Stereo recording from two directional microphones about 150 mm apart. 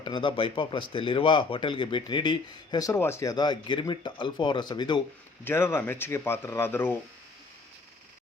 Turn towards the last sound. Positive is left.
turn(degrees=15)  # may be behind; listen again after turning